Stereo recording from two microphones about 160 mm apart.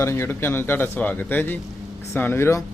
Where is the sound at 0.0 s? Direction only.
15° left (ahead or behind).